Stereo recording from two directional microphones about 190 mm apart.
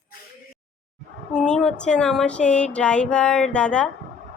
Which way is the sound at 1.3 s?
5° left (ahead or behind).